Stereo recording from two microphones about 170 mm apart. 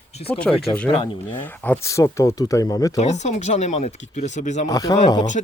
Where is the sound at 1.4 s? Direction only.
10° left (ahead or behind).